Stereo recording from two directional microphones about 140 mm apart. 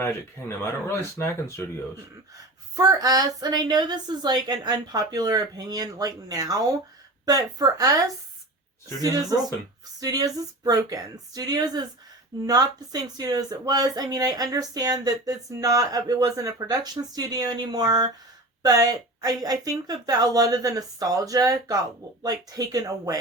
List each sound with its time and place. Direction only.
0.0 s speech: 20° left (ahead or behind)
2.3 s speech: 25° right (ahead or behind)